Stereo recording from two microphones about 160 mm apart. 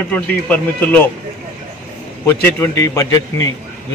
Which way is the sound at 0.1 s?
10° left (ahead or behind).